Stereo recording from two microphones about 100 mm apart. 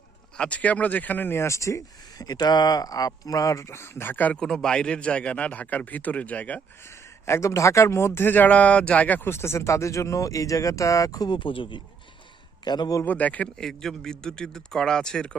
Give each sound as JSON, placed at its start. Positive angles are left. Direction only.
{"t": 0.3, "sound": "speech", "side_deg": 10}
{"t": 7.3, "sound": "speech", "side_deg": 30}
{"t": 11.3, "sound": "speech", "side_deg": 55}
{"t": 12.6, "sound": "a man's voice", "side_deg": 45}
{"t": 13.1, "sound": "speech", "side_deg": 15}